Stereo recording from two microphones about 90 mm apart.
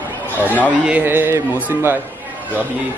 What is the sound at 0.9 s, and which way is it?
A man's voice, 20° right (ahead or behind).